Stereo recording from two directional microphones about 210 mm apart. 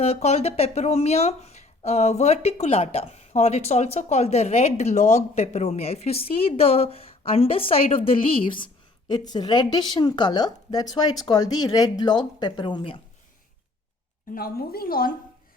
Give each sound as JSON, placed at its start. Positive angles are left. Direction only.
{"t": 0.0, "sound": "speech", "side_deg": 30}
{"t": 14.3, "sound": "a woman's voice", "side_deg": 45}